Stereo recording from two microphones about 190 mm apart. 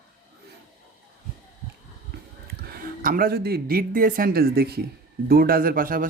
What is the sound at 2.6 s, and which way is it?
Speech, 50° right (ahead or behind).